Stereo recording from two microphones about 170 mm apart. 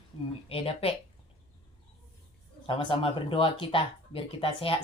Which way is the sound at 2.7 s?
30° left (ahead or behind).